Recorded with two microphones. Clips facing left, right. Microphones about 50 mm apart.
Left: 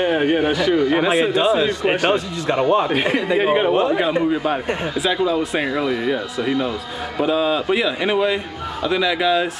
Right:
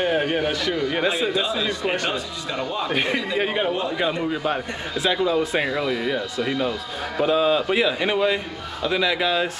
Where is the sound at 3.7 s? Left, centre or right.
Left.